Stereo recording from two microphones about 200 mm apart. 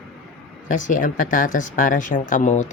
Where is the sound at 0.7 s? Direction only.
40° left (ahead or behind).